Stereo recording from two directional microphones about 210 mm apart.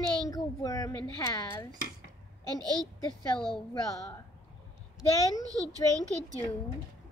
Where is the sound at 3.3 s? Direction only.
Centre (ahead or behind).